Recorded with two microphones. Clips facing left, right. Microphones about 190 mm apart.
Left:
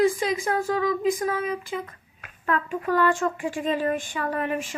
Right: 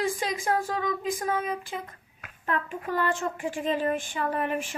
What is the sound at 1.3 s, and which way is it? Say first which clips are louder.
Speech: left 2 dB; 45° right (ahead or behind).